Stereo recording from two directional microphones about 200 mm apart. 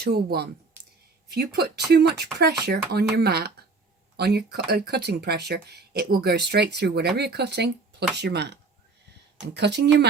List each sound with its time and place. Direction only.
0.0 s speech: 55° right (ahead or behind)
1.9 s speech: 55° right (ahead or behind)